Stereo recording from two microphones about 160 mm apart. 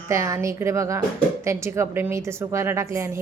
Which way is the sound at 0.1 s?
20° right (ahead or behind).